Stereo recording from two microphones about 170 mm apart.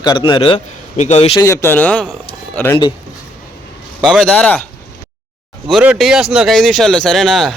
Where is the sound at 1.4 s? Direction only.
15° left (ahead or behind).